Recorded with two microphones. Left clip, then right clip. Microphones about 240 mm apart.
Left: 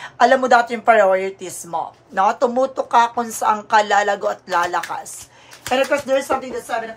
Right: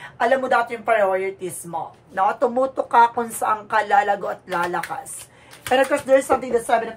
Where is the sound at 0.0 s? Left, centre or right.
Left; by 6.3 s centre.